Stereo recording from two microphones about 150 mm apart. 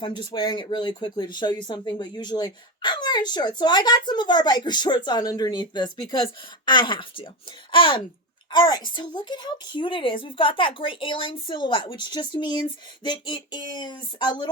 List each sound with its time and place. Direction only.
0.0 s a woman's voice: 35° left (ahead or behind)